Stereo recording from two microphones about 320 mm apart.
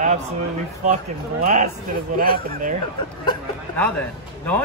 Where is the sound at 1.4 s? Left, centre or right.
Right.